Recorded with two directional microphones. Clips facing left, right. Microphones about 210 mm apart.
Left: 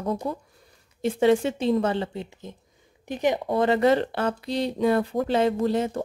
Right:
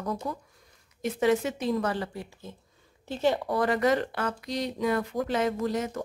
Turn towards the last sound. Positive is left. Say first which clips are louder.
# left 5 dB
turn(degrees=30)  # may be behind; listen again after turning